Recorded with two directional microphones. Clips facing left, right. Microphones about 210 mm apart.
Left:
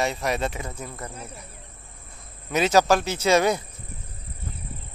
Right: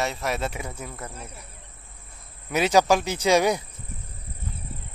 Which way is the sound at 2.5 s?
10° right (ahead or behind).